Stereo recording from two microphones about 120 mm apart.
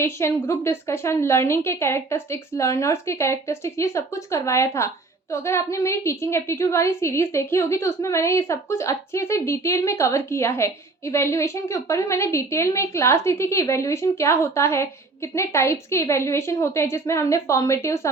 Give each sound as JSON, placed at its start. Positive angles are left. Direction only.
{"t": 0.0, "sound": "a woman's voice", "side_deg": 20}